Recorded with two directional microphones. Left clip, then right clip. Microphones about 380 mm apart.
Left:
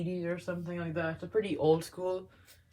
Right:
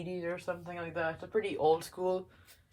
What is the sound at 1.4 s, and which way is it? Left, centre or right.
Speech, centre.